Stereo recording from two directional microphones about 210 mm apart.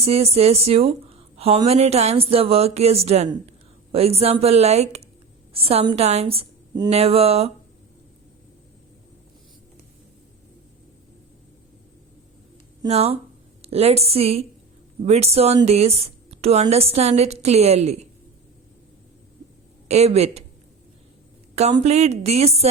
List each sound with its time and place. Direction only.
0.0 s a woman's voice: 30° right (ahead or behind)
12.8 s a woman's voice: 30° right (ahead or behind)
19.9 s a woman's voice: 30° right (ahead or behind)
21.5 s a woman's voice: 30° right (ahead or behind)